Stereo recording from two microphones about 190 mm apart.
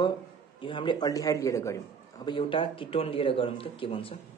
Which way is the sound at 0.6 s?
25° left (ahead or behind).